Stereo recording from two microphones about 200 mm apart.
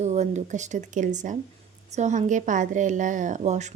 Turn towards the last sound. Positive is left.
turn(degrees=-35)  # may be behind; listen again after turning